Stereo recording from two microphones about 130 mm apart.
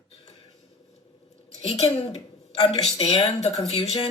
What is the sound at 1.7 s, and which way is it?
Speech, 50° left (ahead or behind).